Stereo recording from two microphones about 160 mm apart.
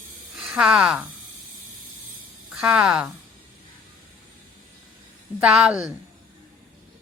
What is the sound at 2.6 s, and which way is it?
Speech, 5° right (ahead or behind).